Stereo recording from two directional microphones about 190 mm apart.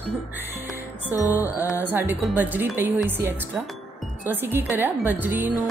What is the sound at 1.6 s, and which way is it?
Speech, 10° right (ahead or behind).